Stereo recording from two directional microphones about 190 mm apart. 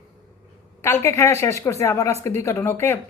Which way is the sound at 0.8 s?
15° left (ahead or behind).